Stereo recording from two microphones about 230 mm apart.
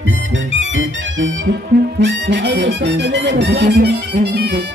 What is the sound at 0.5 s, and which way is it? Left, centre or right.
Music, right.